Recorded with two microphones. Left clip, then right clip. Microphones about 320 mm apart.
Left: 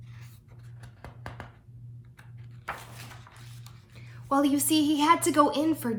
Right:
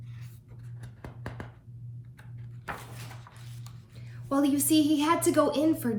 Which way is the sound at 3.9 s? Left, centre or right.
Centre.